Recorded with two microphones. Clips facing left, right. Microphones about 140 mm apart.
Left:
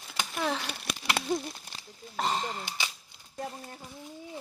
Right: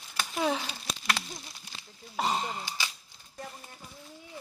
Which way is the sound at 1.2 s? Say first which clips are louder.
Left 11 dB; 60° left (ahead or behind).